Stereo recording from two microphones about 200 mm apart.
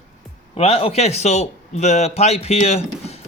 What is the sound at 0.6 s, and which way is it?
A man's voice, 30° left (ahead or behind).